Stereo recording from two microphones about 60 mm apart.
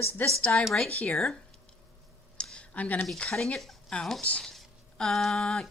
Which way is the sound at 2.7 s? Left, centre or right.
Left.